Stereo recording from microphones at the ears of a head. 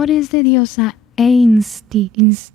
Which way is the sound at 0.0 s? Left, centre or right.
Left.